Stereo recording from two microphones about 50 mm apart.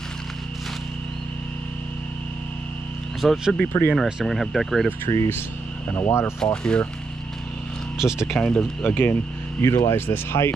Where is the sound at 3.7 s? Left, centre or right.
Left.